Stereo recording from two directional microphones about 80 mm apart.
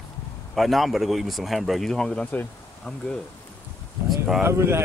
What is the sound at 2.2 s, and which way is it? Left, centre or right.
Speech, left.